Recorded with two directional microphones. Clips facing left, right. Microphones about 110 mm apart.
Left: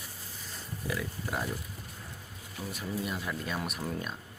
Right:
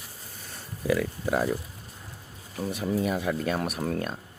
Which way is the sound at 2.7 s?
70° right (ahead or behind).